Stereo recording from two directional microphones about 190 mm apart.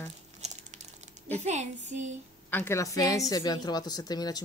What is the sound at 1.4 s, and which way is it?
Speech, 35° right (ahead or behind).